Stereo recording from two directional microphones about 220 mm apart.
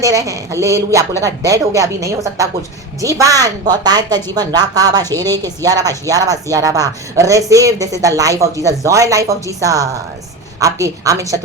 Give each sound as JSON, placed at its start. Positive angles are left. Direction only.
{"t": 0.0, "sound": "a woman's voice", "side_deg": -15}